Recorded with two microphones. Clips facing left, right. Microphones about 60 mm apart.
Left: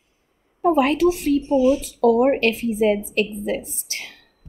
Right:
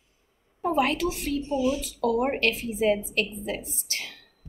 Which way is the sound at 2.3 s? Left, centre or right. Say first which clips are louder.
Left 7 dB; left.